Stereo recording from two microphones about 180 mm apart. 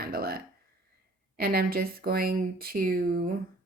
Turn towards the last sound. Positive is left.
turn(degrees=-55)  # may be behind; listen again after turning